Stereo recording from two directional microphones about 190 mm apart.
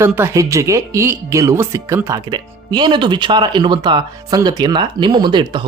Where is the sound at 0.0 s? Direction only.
15° right (ahead or behind).